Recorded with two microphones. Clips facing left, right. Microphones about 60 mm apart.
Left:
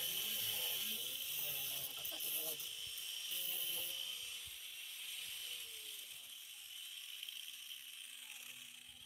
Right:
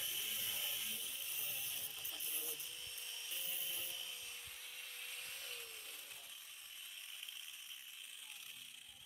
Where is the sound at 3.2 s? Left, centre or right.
Right.